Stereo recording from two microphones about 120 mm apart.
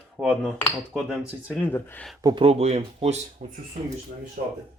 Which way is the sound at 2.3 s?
55° right (ahead or behind).